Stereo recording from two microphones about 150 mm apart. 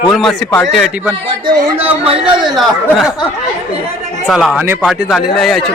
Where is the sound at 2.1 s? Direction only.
35° right (ahead or behind).